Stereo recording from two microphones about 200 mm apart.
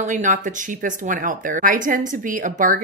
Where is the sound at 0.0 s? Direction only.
40° right (ahead or behind).